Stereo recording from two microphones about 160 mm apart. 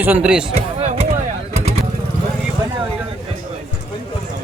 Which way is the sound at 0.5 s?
40° right (ahead or behind).